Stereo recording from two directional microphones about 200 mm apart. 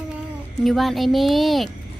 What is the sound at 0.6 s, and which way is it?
A child's voice, centre (ahead or behind).